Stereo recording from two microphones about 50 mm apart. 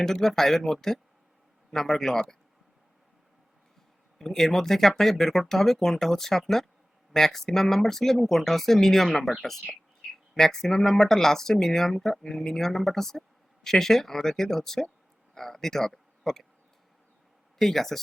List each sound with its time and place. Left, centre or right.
0.0 s speech: centre
4.2 s speech: centre
17.6 s speech: centre